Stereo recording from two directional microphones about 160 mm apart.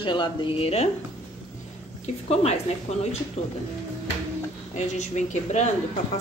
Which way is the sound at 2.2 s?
40° left (ahead or behind).